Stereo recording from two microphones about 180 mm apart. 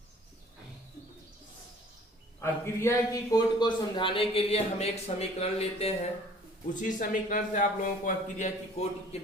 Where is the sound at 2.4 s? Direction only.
15° left (ahead or behind); by 5.9 s 35° left (ahead or behind).